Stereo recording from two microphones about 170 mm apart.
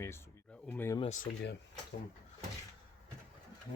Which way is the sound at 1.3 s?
65° left (ahead or behind).